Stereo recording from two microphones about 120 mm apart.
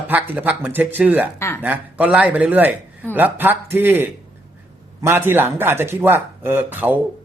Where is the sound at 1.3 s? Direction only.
20° left (ahead or behind).